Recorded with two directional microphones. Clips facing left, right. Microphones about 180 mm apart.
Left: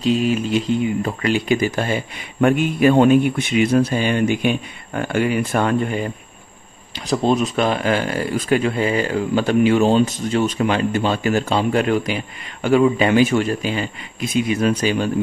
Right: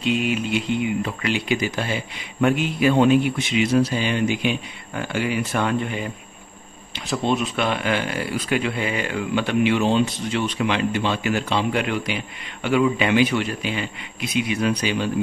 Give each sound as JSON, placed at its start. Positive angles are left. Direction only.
{"t": 0.0, "sound": "speech", "side_deg": 35}
{"t": 7.1, "sound": "speech", "side_deg": 40}